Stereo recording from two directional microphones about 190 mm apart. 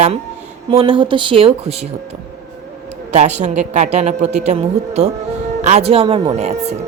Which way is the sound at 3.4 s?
35° right (ahead or behind).